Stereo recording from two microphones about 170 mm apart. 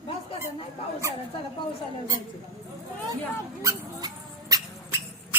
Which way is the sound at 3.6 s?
20° right (ahead or behind).